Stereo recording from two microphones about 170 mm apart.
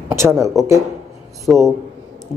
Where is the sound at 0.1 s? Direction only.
15° right (ahead or behind).